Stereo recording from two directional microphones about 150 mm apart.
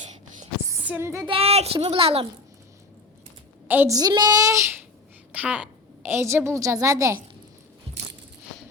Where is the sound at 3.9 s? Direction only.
25° right (ahead or behind).